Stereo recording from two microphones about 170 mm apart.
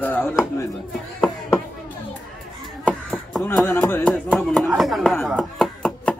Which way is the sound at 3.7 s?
10° left (ahead or behind).